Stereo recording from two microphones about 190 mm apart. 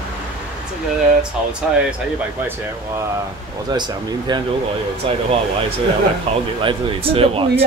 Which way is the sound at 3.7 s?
25° right (ahead or behind).